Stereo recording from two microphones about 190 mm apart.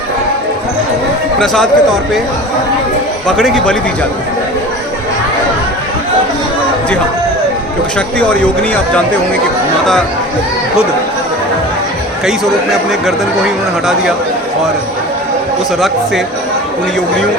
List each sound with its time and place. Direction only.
1.4 s speech: centre (ahead or behind)
3.2 s speech: centre (ahead or behind)
7.9 s speech: 5° left (ahead or behind)